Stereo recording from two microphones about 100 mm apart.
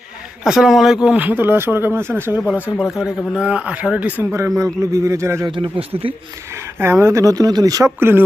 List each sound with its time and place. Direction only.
0.4 s speech: 5° right (ahead or behind)
1.0 s speech: 15° right (ahead or behind)
2.9 s speech: 5° right (ahead or behind)
4.2 s speech: 25° right (ahead or behind)
5.5 s speech: 60° right (ahead or behind)
6.7 s speech: 25° right (ahead or behind)
7.9 s speech: 20° right (ahead or behind)